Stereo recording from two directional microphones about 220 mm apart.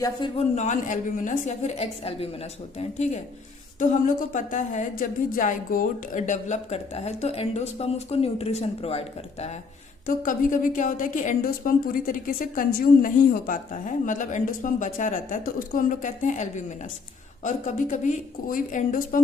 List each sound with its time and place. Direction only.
0.0 s speech: 20° left (ahead or behind)
0.5 s a woman's voice: 35° left (ahead or behind)